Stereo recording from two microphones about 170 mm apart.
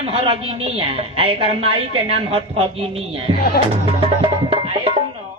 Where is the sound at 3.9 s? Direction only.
35° right (ahead or behind).